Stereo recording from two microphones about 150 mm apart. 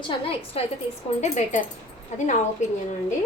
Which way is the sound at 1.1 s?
50° left (ahead or behind).